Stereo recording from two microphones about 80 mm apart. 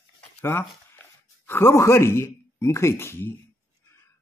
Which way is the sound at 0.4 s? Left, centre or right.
Left.